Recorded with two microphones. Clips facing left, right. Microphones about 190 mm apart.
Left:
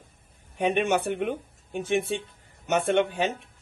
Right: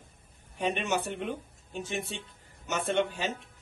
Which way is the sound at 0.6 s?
55° left (ahead or behind).